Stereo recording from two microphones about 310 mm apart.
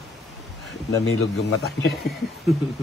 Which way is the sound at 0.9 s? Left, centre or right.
Left.